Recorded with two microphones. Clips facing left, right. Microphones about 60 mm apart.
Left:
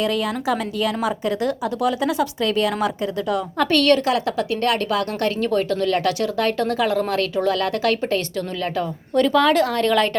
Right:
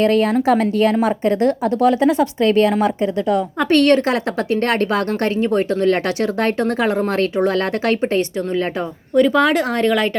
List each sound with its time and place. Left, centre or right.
0.0 s a woman's voice: right; by 10.1 s centre